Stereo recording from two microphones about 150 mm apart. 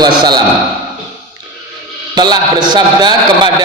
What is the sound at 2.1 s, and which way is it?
A man's voice, 30° right (ahead or behind).